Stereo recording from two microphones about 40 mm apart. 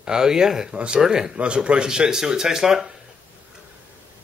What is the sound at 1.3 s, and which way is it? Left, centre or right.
Speech, right.